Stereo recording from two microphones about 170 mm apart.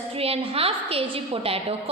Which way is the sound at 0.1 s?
35° right (ahead or behind).